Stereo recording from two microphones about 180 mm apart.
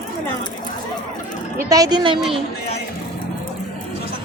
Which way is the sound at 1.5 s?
20° right (ahead or behind).